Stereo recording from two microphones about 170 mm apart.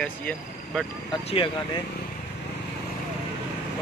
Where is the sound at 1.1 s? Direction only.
30° left (ahead or behind).